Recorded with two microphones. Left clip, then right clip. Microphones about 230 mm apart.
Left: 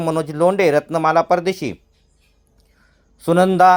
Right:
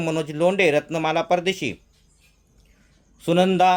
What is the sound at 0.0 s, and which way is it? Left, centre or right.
Speech, centre.